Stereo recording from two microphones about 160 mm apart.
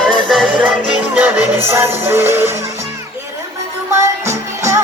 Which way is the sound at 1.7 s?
15° right (ahead or behind).